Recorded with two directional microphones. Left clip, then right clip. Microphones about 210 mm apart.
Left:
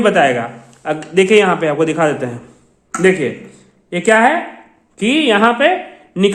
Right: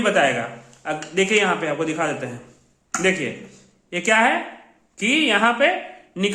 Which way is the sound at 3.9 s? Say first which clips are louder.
Left 6 dB; 30° left (ahead or behind).